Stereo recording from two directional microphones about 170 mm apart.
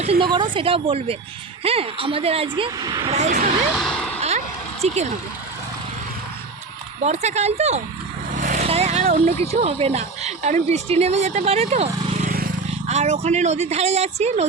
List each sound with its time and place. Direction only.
0.0 s speech: 35° right (ahead or behind)
3.1 s speech: 45° right (ahead or behind)
3.8 s vehicle: centre (ahead or behind)
4.8 s speech: 40° right (ahead or behind)
7.0 s speech: 40° right (ahead or behind)
8.4 s vehicle: 50° right (ahead or behind)
8.6 s speech: 35° right (ahead or behind)
12.0 s vehicle: 40° right (ahead or behind)
12.9 s speech: 40° right (ahead or behind)